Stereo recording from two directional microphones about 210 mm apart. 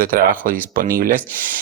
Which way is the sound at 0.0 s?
45° right (ahead or behind).